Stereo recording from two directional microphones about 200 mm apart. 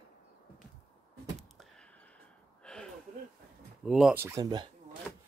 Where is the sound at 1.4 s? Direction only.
Centre (ahead or behind).